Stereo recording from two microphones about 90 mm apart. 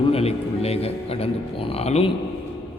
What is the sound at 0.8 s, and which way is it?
A man's voice, 90° left.